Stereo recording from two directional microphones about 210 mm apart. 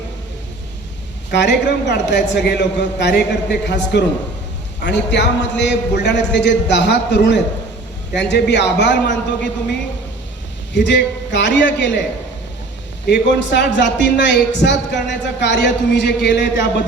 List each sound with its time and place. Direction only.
1.3 s a man's voice: 55° left (ahead or behind)
10.8 s a man's voice: 55° left (ahead or behind)
13.1 s a man's voice: 55° left (ahead or behind)